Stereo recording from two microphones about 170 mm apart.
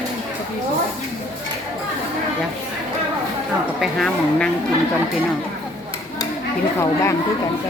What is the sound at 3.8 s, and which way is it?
Speech, centre (ahead or behind).